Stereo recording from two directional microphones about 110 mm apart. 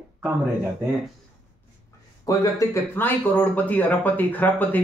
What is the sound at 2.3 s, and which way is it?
Speech, 35° left (ahead or behind).